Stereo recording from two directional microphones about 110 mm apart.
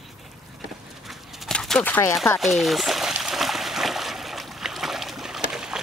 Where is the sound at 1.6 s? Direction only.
10° left (ahead or behind).